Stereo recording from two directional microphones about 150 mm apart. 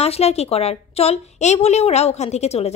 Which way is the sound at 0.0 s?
45° left (ahead or behind).